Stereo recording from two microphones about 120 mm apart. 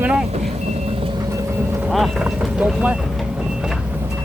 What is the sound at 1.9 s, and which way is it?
Boat, centre (ahead or behind).